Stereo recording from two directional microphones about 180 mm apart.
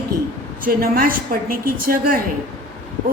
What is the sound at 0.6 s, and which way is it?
A woman's voice, 55° right (ahead or behind).